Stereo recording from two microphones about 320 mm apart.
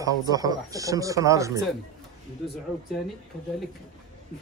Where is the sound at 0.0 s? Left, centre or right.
Centre.